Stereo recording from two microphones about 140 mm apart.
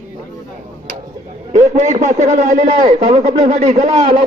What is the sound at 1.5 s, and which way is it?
A man's voice, 55° right (ahead or behind).